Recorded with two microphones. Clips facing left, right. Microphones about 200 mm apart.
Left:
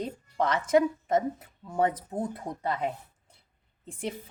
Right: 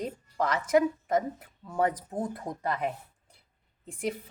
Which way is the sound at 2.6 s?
25° left (ahead or behind).